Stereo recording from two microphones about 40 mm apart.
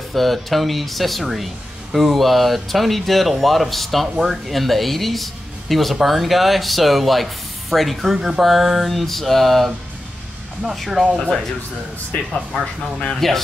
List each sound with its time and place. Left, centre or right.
0.1 s speech: centre
12.1 s speech: left
13.1 s speech: centre